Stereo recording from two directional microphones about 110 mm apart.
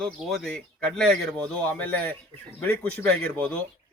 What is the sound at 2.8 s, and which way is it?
Speech, 10° left (ahead or behind).